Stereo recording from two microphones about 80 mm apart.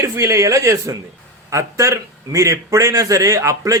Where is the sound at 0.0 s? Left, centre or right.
Right.